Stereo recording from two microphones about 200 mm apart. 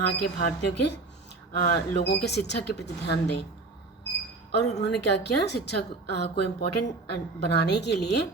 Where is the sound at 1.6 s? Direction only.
55° left (ahead or behind).